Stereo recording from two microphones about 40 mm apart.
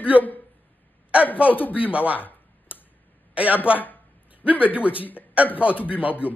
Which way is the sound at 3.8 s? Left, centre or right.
Left.